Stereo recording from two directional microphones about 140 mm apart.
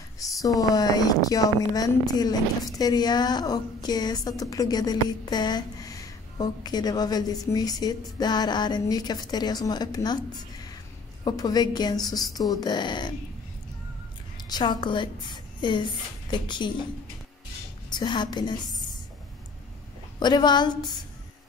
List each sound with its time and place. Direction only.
0.2 s a sound: 25° left (ahead or behind)
0.6 s a woman's voice: 25° left (ahead or behind)
14.5 s a woman's voice: 35° left (ahead or behind)
17.9 s a woman's voice: 30° left (ahead or behind)
20.2 s a woman's voice: 30° left (ahead or behind)